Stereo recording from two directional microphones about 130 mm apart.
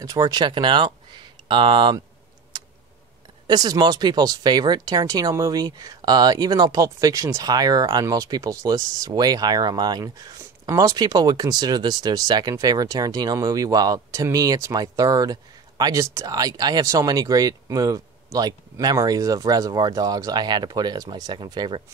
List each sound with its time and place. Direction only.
0.0 s speech: 30° right (ahead or behind)
3.4 s speech: 30° right (ahead or behind)